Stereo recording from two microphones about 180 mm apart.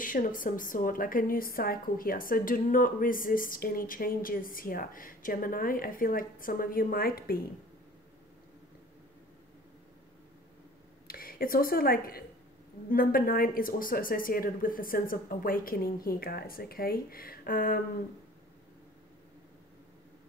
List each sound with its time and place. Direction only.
0.0 s speech: 50° left (ahead or behind)
11.1 s a woman's voice: 55° left (ahead or behind)